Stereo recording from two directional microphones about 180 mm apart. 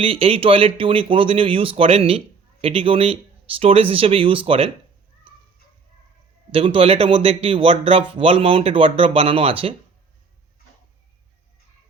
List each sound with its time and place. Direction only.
0.0 s speech: 30° right (ahead or behind)
5.3 s a sound: 30° right (ahead or behind)
6.5 s speech: 30° right (ahead or behind)